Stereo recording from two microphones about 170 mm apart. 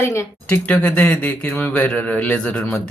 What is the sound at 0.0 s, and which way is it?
Speech, 15° left (ahead or behind).